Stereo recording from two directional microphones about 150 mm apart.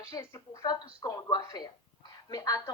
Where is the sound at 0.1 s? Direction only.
20° left (ahead or behind).